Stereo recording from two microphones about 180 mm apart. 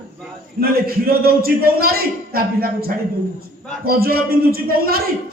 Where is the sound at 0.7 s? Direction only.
55° right (ahead or behind).